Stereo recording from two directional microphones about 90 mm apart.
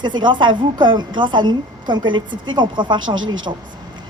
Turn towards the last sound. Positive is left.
turn(degrees=-60)  # may be behind; listen again after turning